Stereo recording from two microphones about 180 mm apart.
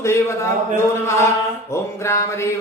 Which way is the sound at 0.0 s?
15° left (ahead or behind).